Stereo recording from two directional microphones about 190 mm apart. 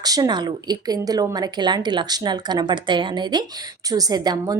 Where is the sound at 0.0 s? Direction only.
20° right (ahead or behind).